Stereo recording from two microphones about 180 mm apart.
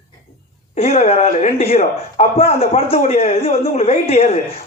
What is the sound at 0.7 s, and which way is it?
Speech, 35° left (ahead or behind).